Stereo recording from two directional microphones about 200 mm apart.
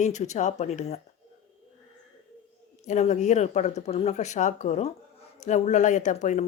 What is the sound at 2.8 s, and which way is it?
A woman's voice, 35° left (ahead or behind).